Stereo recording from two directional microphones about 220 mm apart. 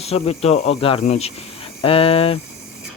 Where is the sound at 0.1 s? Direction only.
30° left (ahead or behind).